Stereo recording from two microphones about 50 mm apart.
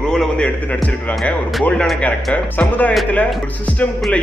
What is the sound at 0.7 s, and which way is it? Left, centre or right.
Speech, left.